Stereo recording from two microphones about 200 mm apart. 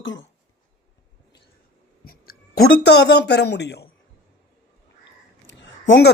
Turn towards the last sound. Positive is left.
turn(degrees=65)  # may be behind; listen again after turning